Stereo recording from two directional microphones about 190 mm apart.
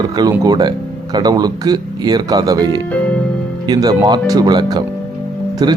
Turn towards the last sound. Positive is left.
turn(degrees=-20)  # may be behind; listen again after turning